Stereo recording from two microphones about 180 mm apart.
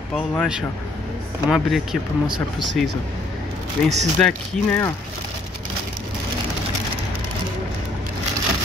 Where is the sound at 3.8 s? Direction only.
40° right (ahead or behind).